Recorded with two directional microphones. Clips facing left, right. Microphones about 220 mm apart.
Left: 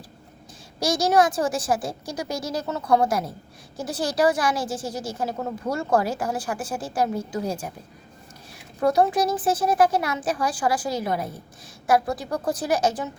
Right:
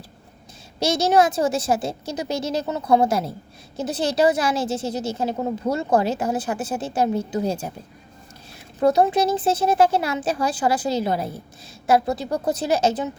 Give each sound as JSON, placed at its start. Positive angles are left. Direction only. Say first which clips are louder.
{"t": 0.8, "sound": "a woman's voice", "louder": "right 2 dB", "side_deg": -25}
{"t": 8.8, "sound": "a woman's voice", "louder": "right 2 dB", "side_deg": -20}